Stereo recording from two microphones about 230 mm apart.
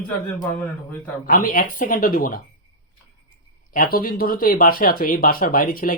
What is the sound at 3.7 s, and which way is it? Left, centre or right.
Speech, left.